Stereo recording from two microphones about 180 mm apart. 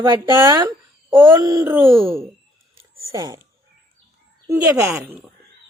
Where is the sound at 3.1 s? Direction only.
20° right (ahead or behind).